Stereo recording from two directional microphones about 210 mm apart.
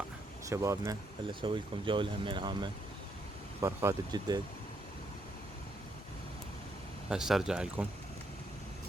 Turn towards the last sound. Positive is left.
turn(degrees=-5)  # may be behind; listen again after turning